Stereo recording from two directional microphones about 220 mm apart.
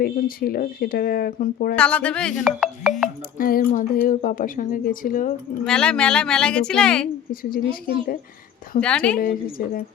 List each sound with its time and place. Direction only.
0.0 s speech: 40° left (ahead or behind)
1.7 s a woman's voice: 5° left (ahead or behind)
3.3 s speech: 40° left (ahead or behind)
5.6 s a woman's voice: 5° left (ahead or behind)
7.5 s speech: 40° left (ahead or behind)
8.8 s a woman's voice: 5° left (ahead or behind)
9.1 s speech: 40° left (ahead or behind)